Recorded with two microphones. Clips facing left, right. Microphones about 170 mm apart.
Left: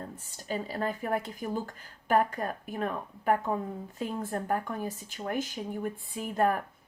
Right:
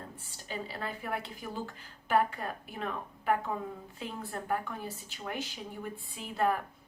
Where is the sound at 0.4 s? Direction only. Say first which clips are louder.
Left 6 dB; 45° left (ahead or behind).